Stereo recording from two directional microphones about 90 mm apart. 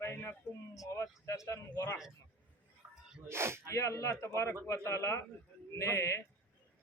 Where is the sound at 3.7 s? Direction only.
35° left (ahead or behind).